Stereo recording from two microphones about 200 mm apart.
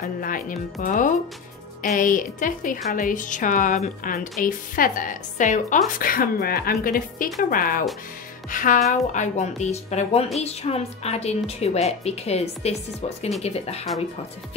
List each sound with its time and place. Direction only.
0.0 s a woman's voice: 45° left (ahead or behind)